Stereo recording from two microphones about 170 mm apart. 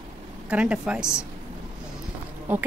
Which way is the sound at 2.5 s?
10° right (ahead or behind).